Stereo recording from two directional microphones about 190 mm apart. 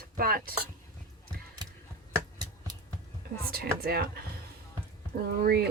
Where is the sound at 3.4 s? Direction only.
55° right (ahead or behind).